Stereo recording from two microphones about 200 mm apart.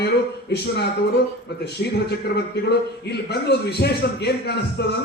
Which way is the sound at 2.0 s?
55° left (ahead or behind).